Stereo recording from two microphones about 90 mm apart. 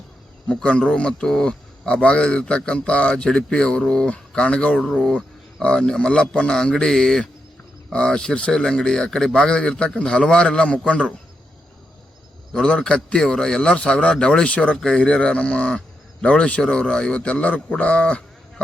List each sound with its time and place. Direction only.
0.4 s a man's voice: 10° left (ahead or behind)
12.5 s a man's voice: 5° left (ahead or behind)